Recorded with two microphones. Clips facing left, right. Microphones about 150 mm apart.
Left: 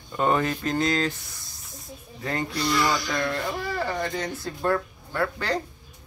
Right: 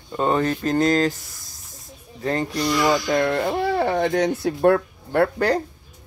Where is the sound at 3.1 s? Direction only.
55° right (ahead or behind).